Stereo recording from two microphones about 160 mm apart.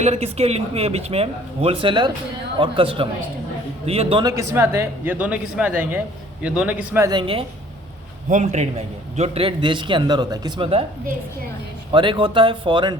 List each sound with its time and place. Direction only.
0.0 s speech: 40° right (ahead or behind)
4.2 s speech: 20° right (ahead or behind)
7.1 s speech: 30° right (ahead or behind)
8.3 s a man's voice: 45° right (ahead or behind); by 10.7 s 25° right (ahead or behind)
11.9 s speech: 30° right (ahead or behind)